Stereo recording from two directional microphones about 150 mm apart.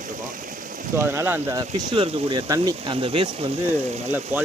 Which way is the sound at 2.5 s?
25° right (ahead or behind).